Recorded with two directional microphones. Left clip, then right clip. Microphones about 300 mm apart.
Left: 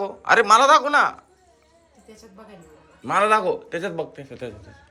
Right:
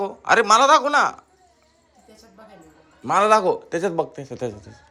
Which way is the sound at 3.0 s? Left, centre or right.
Centre.